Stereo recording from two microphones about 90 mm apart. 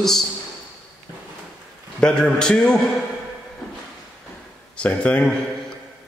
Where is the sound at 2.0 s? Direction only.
10° left (ahead or behind).